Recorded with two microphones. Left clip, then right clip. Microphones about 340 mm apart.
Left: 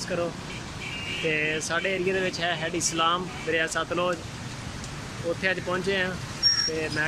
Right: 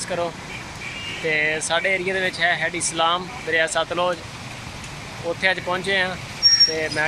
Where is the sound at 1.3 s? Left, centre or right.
Centre.